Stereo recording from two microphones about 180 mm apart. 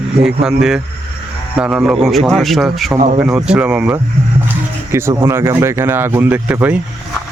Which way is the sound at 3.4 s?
5° right (ahead or behind).